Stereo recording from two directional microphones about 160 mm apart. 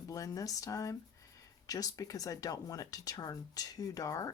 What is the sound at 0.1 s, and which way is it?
Speech, 20° left (ahead or behind).